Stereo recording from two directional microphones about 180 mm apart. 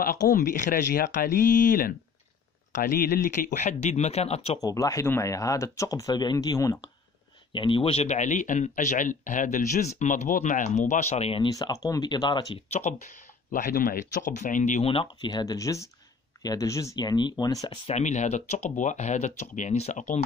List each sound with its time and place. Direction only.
0.0 s speech: 50° left (ahead or behind); by 4.6 s 35° left (ahead or behind)
4.6 s speech: 20° left (ahead or behind); by 11.4 s 35° left (ahead or behind)
11.5 s speech: 20° left (ahead or behind)
12.6 s speech: 40° left (ahead or behind); by 17.7 s 20° left (ahead or behind)
17.8 s speech: 40° left (ahead or behind)